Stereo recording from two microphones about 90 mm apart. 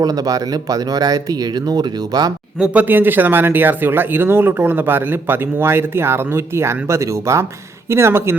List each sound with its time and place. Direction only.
0.0 s speech: 45° right (ahead or behind)
2.6 s speech: 20° right (ahead or behind)